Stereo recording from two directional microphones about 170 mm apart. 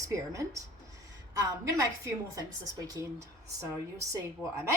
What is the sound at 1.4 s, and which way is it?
A woman's voice, 20° right (ahead or behind).